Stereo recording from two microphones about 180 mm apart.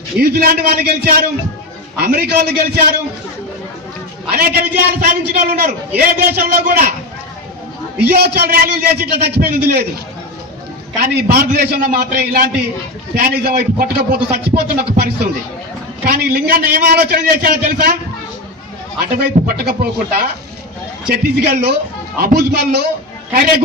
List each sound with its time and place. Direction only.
0.2 s a man's voice: 60° right (ahead or behind)
4.4 s a man's voice: 55° right (ahead or behind)
8.0 s a man's voice: 65° right (ahead or behind)
11.0 s a man's voice: 60° right (ahead or behind)
19.2 s a man's voice: 60° right (ahead or behind)